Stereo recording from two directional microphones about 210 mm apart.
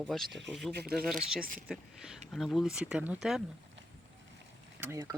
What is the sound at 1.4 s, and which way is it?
Speech, 40° right (ahead or behind).